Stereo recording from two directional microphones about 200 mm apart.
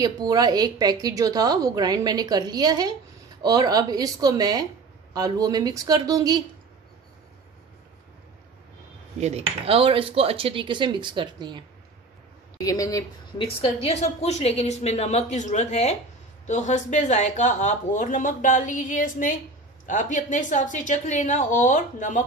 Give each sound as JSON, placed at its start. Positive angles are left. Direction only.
{"t": 0.0, "sound": "a woman's voice", "side_deg": -20}
{"t": 9.2, "sound": "a woman's voice", "side_deg": -30}
{"t": 12.5, "sound": "speech", "side_deg": 15}
{"t": 13.6, "sound": "speech", "side_deg": 30}